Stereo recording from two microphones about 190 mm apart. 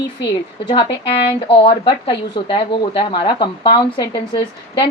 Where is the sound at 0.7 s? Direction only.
25° left (ahead or behind).